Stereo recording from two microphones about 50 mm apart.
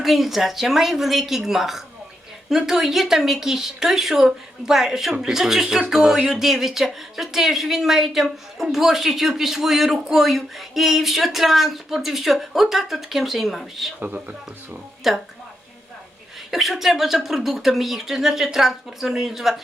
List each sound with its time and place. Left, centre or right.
0.0 s a woman's voice: centre
14.0 s speech: right
15.1 s speech: centre
16.5 s speech: centre